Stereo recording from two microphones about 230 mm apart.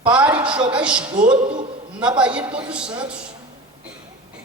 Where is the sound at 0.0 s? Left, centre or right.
Centre.